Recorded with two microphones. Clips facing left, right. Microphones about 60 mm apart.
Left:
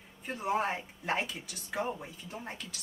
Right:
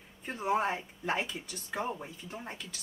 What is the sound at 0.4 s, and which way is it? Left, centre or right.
Speech, centre.